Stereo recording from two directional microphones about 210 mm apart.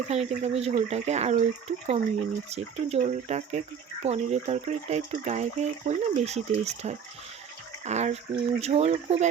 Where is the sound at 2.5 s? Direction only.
30° right (ahead or behind).